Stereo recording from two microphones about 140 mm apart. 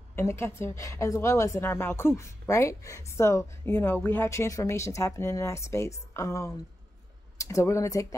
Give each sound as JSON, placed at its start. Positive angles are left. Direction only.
{"t": 0.1, "sound": "a woman's voice", "side_deg": 20}